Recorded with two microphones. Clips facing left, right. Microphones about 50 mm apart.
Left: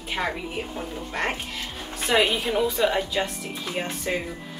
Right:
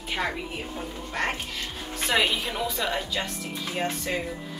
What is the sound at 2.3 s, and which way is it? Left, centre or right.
Speech, centre.